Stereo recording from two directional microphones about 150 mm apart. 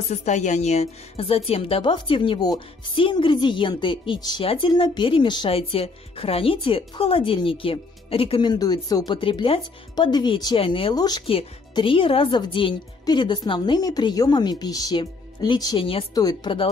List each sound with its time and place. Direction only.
0.1 s a woman's voice: 50° left (ahead or behind); by 16.6 s 30° left (ahead or behind)